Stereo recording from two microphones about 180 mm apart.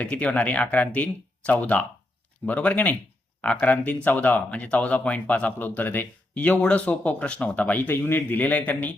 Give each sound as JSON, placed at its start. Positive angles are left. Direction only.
{"t": 0.0, "sound": "speech", "side_deg": 5}